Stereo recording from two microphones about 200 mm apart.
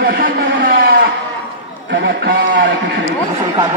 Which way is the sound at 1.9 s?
55° right (ahead or behind).